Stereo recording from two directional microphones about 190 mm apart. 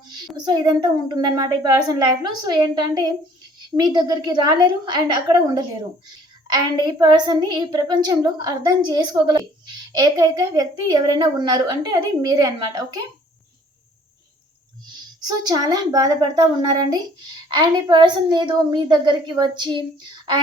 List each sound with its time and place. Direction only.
0.3 s a woman's voice: 20° right (ahead or behind)
15.2 s a woman's voice: 20° right (ahead or behind)